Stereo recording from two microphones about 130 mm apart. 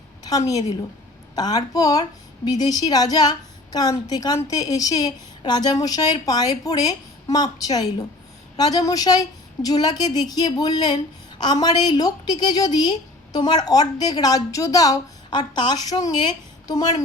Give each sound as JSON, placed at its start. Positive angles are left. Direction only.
{"t": 0.3, "sound": "a woman's voice", "side_deg": 25}